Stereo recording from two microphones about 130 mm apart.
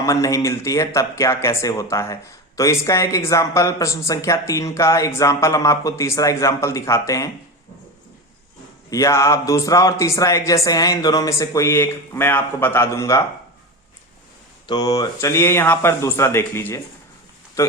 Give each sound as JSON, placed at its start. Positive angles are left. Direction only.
{"t": 0.0, "sound": "speech", "side_deg": 25}
{"t": 8.9, "sound": "speech", "side_deg": 25}
{"t": 14.7, "sound": "speech", "side_deg": 30}